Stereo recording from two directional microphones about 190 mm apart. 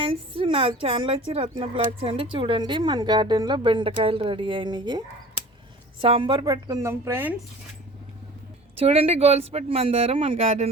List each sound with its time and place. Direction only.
0.0 s speech: 30° right (ahead or behind); by 7.3 s 10° right (ahead or behind)
8.8 s speech: 30° right (ahead or behind)